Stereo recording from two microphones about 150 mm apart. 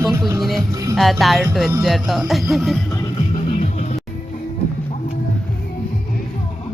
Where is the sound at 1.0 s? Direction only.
Centre (ahead or behind).